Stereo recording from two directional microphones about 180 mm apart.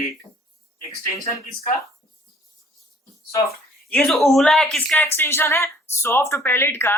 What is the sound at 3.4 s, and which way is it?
Speech, 5° left (ahead or behind).